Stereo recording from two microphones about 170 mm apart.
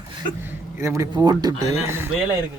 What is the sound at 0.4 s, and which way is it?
Speech, 15° right (ahead or behind).